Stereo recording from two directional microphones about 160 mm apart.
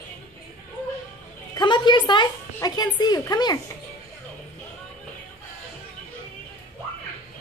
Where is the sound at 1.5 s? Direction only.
30° left (ahead or behind).